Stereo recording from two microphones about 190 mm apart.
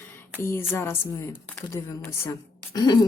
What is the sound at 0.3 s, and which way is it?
Speech, 10° left (ahead or behind).